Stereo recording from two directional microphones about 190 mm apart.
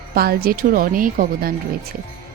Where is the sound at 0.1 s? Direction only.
55° right (ahead or behind).